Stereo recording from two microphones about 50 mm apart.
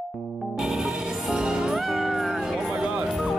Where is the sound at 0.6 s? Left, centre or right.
Centre.